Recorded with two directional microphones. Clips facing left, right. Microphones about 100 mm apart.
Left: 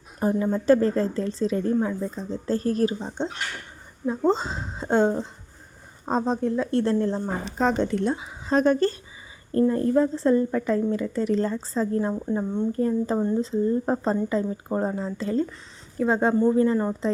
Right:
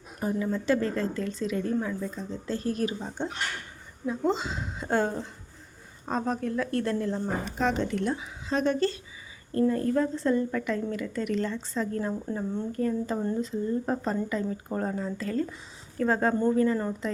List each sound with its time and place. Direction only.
0.2 s speech: 40° left (ahead or behind)
3.2 s speech: 20° left (ahead or behind)
4.0 s speech: 35° left (ahead or behind)
8.4 s speech: 40° left (ahead or behind)
9.5 s speech: 30° left (ahead or behind)